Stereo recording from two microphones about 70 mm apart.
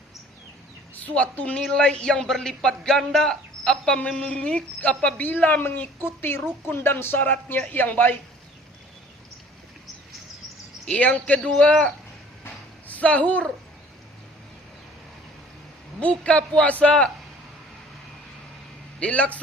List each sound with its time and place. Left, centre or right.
0.9 s a woman's voice: left
4.4 s a woman's voice: centre
10.8 s a woman's voice: centre
12.9 s a woman's voice: left
16.0 s a woman's voice: centre
18.9 s a man's voice: centre